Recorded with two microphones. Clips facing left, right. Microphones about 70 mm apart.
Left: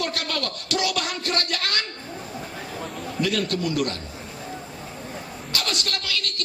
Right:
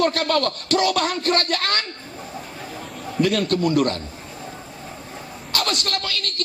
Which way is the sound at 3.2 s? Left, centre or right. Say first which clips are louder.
Right 5 dB; right.